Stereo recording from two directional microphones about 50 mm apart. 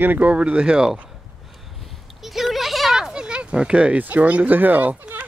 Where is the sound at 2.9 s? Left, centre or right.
Centre.